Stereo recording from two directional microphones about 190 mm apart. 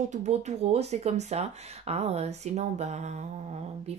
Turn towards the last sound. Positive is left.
turn(degrees=-35)  # may be behind; listen again after turning